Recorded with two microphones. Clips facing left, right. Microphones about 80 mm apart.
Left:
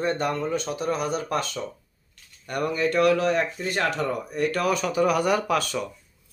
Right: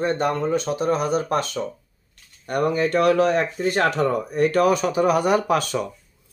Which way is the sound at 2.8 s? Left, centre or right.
Right.